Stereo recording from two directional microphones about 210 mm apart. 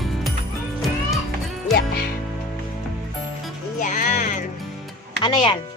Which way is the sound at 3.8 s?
40° left (ahead or behind).